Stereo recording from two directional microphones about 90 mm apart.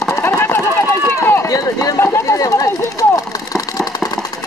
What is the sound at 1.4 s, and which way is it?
Run, 40° left (ahead or behind).